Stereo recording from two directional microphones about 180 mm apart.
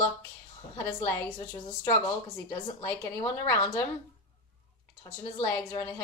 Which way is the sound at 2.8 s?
15° left (ahead or behind).